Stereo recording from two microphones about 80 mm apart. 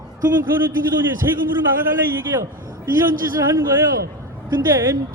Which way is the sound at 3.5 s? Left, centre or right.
Right.